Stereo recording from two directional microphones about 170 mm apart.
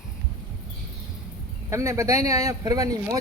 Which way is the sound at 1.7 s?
15° right (ahead or behind).